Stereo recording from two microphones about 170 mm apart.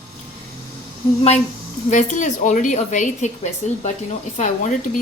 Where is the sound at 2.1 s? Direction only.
45° left (ahead or behind).